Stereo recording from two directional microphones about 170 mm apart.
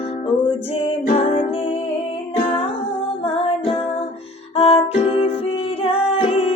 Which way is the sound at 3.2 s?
35° left (ahead or behind).